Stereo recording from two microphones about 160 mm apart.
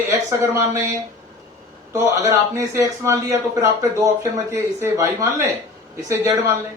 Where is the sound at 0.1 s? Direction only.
20° right (ahead or behind).